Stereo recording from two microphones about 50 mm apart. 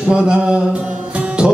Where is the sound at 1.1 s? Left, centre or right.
Centre.